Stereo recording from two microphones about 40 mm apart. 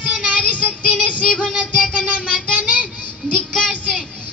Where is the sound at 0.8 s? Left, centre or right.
Left.